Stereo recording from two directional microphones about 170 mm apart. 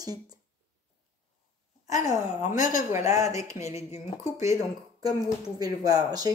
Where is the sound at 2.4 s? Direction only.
50° left (ahead or behind).